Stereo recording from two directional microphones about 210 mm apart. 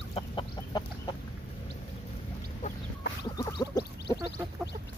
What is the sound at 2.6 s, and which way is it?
Chicken, 35° left (ahead or behind).